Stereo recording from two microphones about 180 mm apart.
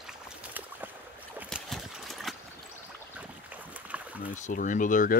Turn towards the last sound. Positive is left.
turn(degrees=45)  # may be behind; listen again after turning